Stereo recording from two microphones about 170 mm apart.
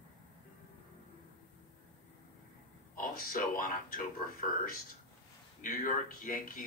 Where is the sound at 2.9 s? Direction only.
55° left (ahead or behind).